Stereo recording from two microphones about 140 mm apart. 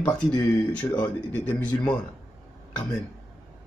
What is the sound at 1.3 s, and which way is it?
Speech, 10° left (ahead or behind).